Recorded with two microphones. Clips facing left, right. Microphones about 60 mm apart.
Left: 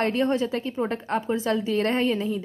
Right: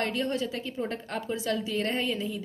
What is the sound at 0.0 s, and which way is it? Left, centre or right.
A woman's voice, left.